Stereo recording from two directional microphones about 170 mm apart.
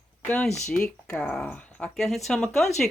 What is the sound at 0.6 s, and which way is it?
Speech, 5° left (ahead or behind).